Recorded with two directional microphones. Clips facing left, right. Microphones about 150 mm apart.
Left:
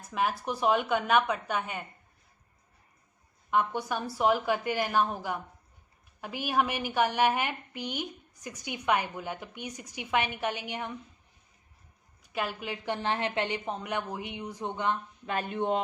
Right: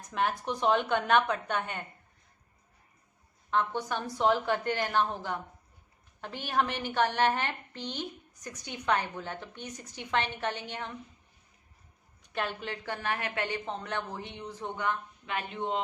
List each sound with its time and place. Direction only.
0.0 s a woman's voice: 5° left (ahead or behind)
3.5 s a woman's voice: 10° left (ahead or behind)
12.2 s a woman's voice: 5° left (ahead or behind)
15.3 s speech: 45° left (ahead or behind)